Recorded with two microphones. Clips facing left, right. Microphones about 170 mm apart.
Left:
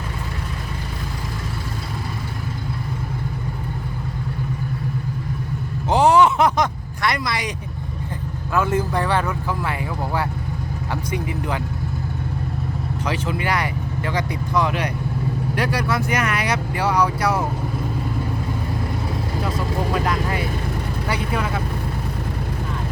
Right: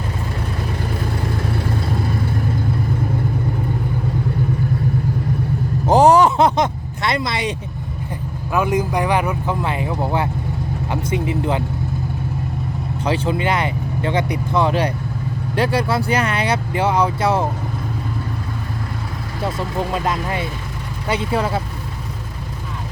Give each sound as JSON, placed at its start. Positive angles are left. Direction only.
{"t": 5.9, "sound": "a sound", "side_deg": -40}
{"t": 8.5, "sound": "speech", "side_deg": -15}
{"t": 13.1, "sound": "speech", "side_deg": -25}
{"t": 19.9, "sound": "speech", "side_deg": -25}